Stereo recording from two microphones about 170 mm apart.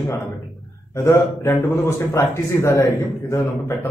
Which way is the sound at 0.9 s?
15° left (ahead or behind).